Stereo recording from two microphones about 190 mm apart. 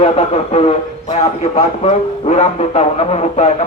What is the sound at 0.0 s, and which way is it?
A man's voice, 30° left (ahead or behind).